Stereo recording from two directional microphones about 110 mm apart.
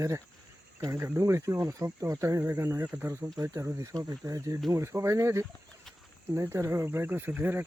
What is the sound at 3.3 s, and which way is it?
Speech, 30° right (ahead or behind).